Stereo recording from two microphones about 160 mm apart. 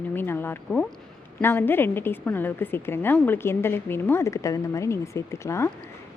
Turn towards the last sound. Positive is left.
turn(degrees=20)  # may be behind; listen again after turning